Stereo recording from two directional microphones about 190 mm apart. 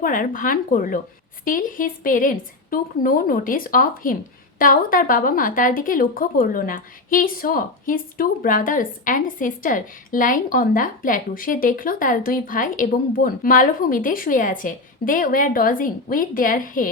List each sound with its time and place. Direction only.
0.0 s a woman's voice: 45° left (ahead or behind)